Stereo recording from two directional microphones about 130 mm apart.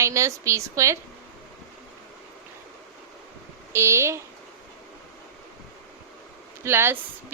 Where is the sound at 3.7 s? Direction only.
20° right (ahead or behind).